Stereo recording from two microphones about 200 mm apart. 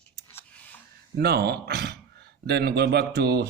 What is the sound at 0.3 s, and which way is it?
Scissors, 10° left (ahead or behind).